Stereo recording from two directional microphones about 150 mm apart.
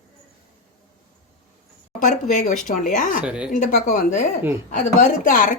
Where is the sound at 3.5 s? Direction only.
65° left (ahead or behind).